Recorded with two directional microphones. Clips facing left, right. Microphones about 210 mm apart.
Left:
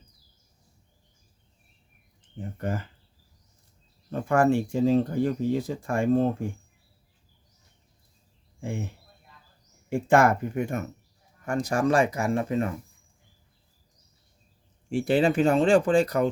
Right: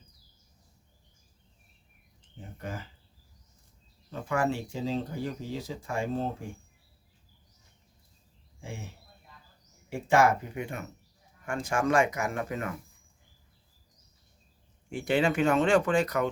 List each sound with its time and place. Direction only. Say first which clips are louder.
2.6 s speech: left 8 dB; 55° left (ahead or behind)
4.1 s speech: left 7 dB; 50° left (ahead or behind)
8.6 s speech: left 9 dB; 55° left (ahead or behind)
9.9 s speech: left 3 dB; 55° left (ahead or behind); by 12.7 s 30° left (ahead or behind)
14.8 s speech: left 4 dB; 30° left (ahead or behind)